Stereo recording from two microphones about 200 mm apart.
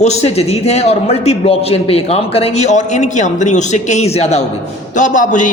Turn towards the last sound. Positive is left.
turn(degrees=40)  # may be behind; listen again after turning